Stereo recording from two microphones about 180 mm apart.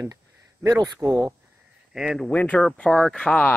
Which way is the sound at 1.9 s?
Centre (ahead or behind).